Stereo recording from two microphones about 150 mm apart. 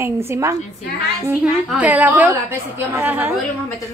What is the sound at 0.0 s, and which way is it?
Speech, 15° right (ahead or behind).